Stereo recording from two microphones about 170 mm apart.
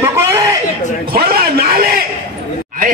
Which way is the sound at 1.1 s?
60° right (ahead or behind).